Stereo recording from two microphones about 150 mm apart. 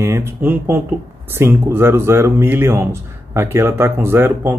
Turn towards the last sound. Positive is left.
turn(degrees=-15)  # may be behind; listen again after turning